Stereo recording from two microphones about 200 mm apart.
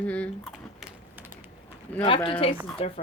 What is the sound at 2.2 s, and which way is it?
Speech, 25° left (ahead or behind).